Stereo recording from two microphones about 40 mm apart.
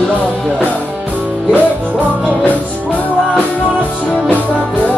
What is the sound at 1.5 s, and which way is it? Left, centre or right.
Music, right.